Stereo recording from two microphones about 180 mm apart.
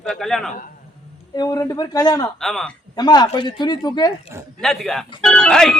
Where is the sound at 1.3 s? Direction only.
20° left (ahead or behind).